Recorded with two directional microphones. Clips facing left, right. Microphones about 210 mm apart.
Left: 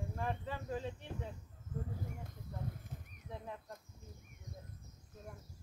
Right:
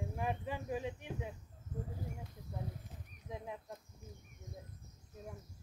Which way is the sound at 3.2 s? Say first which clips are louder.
Right 2 dB; 15° right (ahead or behind).